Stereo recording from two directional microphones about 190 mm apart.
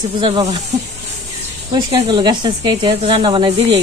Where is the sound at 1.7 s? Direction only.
25° right (ahead or behind).